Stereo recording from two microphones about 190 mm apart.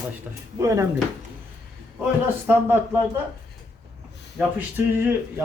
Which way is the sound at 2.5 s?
10° right (ahead or behind).